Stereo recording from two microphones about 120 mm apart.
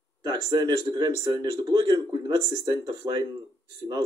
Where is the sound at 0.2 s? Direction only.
35° right (ahead or behind).